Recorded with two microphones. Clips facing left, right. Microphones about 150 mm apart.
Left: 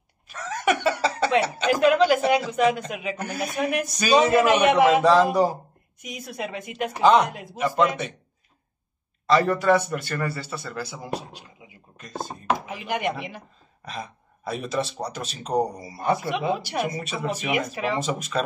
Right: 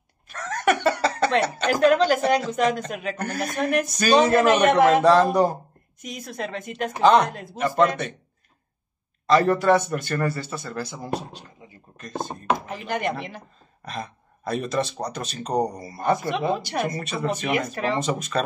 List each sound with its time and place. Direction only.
0.3 s chicken: 5° left (ahead or behind)
1.8 s speech: 5° left (ahead or behind)
9.3 s a man's voice: 45° right (ahead or behind)
12.8 s speech: 10° left (ahead or behind)